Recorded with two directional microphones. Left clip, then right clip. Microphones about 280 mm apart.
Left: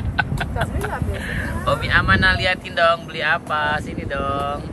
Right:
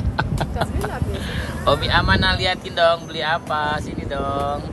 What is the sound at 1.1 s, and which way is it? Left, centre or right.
Speech, centre.